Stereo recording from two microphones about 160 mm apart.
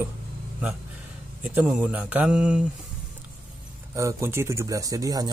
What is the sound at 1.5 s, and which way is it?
Speech, 10° right (ahead or behind).